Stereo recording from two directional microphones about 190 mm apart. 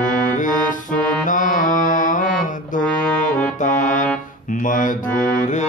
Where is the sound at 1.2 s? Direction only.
45° left (ahead or behind).